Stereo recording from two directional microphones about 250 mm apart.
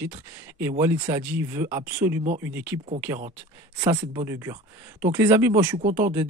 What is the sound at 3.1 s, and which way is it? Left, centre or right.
Speech, centre.